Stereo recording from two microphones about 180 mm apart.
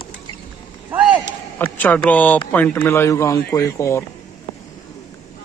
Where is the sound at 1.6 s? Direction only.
10° left (ahead or behind).